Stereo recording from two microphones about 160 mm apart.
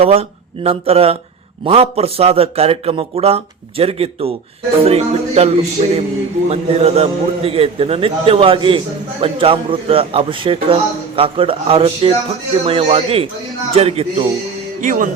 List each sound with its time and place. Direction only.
0.0 s a man's voice: 40° right (ahead or behind)
14.8 s music: 55° right (ahead or behind)